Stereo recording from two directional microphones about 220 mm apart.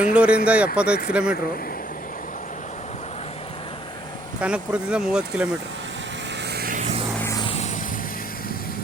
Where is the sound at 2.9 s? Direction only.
30° left (ahead or behind).